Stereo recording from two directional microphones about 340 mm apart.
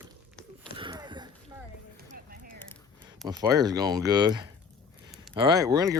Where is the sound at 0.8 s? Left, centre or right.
Centre.